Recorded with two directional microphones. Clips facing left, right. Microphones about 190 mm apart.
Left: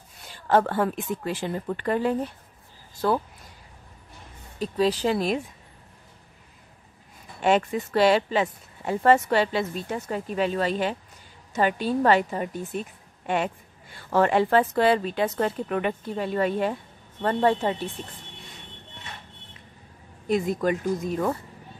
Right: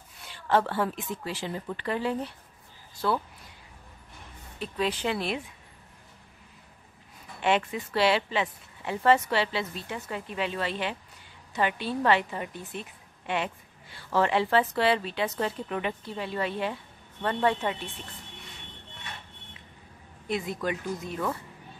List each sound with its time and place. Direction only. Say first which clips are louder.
0.3 s speech: left 4 dB; 45° left (ahead or behind)
4.6 s speech: left 6 dB; 35° left (ahead or behind)
7.4 s speech: left 4 dB; 45° left (ahead or behind)
20.2 s speech: left 7 dB; 45° left (ahead or behind)